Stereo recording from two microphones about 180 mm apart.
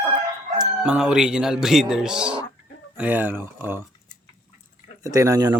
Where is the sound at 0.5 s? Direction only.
5° right (ahead or behind).